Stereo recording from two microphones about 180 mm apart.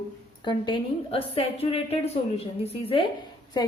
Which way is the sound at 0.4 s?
25° left (ahead or behind).